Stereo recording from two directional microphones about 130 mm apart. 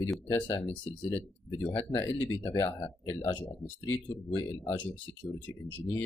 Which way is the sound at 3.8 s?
15° left (ahead or behind).